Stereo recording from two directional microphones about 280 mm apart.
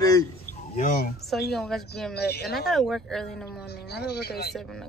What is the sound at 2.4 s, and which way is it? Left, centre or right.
Speech, centre.